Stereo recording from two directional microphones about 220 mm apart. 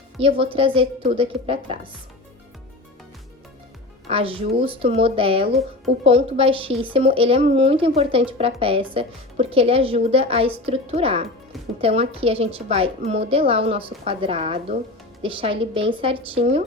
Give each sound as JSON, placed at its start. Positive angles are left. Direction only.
{"t": 0.2, "sound": "speech", "side_deg": -25}
{"t": 4.1, "sound": "speech", "side_deg": -25}